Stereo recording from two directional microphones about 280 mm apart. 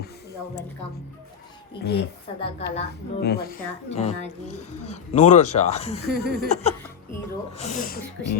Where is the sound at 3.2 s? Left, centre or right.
Left.